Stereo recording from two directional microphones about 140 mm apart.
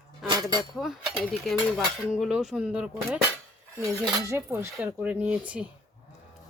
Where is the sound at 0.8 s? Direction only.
5° right (ahead or behind).